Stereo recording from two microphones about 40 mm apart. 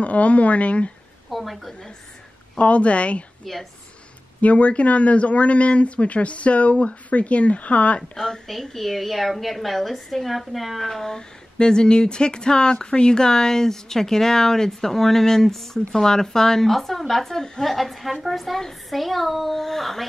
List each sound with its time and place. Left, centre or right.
0.0 s speech: left
1.3 s a woman's voice: centre
2.5 s speech: left
4.4 s speech: left
8.1 s speech: centre
8.7 s a woman's voice: centre